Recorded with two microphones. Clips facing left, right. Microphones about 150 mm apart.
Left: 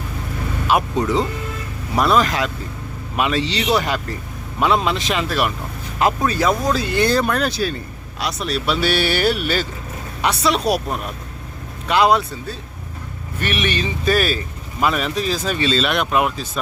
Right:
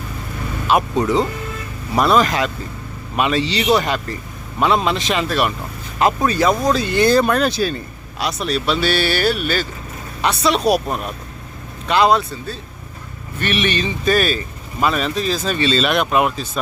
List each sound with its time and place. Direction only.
0.7 s speech: centre (ahead or behind)
7.1 s speech: 20° right (ahead or behind)
8.2 s a woman's voice: centre (ahead or behind)
11.9 s speech: 10° left (ahead or behind)